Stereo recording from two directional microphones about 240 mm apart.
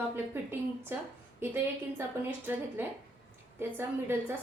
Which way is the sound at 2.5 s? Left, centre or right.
Centre.